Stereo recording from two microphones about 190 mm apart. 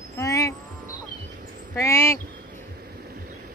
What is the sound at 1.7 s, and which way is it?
Speech, 15° left (ahead or behind).